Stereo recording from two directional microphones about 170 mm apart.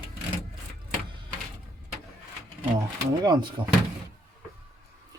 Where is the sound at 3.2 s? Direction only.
25° right (ahead or behind).